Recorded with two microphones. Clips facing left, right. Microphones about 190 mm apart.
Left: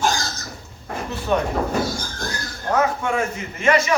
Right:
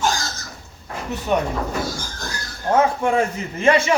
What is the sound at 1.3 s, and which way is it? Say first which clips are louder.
Speech: even; 20° right (ahead or behind).